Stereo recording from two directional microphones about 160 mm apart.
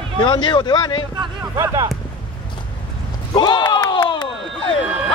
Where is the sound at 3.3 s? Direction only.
25° left (ahead or behind).